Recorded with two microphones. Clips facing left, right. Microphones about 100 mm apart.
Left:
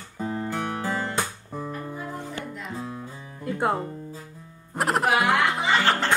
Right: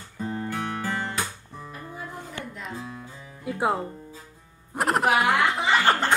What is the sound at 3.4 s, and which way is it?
Music, 5° right (ahead or behind).